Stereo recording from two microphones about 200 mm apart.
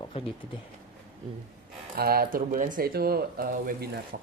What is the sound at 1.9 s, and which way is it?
Speech, 50° right (ahead or behind).